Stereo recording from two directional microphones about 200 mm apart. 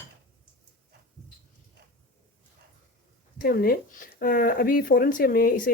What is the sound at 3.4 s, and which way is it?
Speech, 50° left (ahead or behind).